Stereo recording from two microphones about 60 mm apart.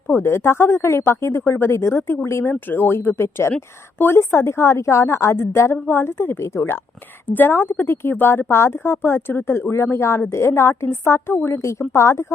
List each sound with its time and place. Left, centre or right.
0.1 s speech: left
2.5 s speech: left
6.4 s speech: left
7.3 s speech: left
11.6 s speech: left